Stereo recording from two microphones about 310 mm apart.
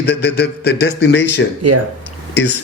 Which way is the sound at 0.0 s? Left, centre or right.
Left.